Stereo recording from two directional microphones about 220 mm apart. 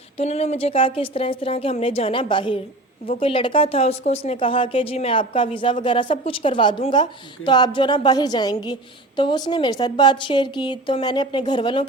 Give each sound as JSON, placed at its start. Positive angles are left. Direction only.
{"t": 0.2, "sound": "a woman's voice", "side_deg": 30}